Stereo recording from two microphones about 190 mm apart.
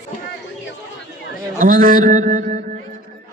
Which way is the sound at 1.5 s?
45° right (ahead or behind).